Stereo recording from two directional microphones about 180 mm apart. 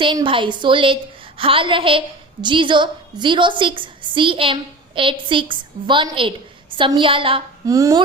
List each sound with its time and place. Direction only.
0.0 s a woman's voice: 25° right (ahead or behind)